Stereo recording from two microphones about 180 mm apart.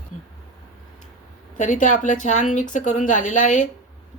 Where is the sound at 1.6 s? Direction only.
45° left (ahead or behind).